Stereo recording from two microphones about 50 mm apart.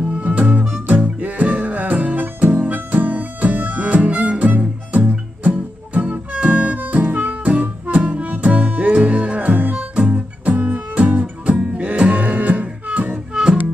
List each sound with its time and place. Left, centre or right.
0.1 s music: right
13.3 s music: centre